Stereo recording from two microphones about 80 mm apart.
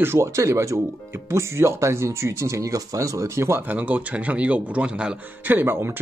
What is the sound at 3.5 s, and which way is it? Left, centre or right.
Speech, right.